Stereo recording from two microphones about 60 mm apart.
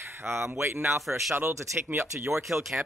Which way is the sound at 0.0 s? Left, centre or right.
Right.